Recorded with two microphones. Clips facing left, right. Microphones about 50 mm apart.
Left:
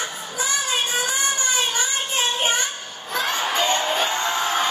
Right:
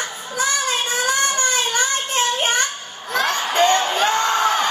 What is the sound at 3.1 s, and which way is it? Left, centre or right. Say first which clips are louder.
Crowd: right 4 dB; right.